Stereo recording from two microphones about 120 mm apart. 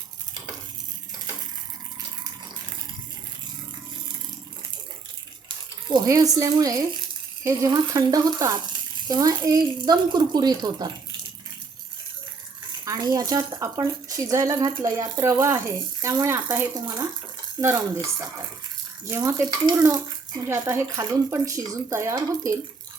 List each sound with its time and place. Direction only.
5.9 s speech: 30° right (ahead or behind)
12.8 s speech: 30° right (ahead or behind)
16.8 s speech: 35° right (ahead or behind)
19.0 s speech: 25° right (ahead or behind)